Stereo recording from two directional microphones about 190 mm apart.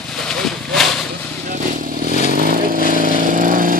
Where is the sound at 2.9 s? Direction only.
45° right (ahead or behind).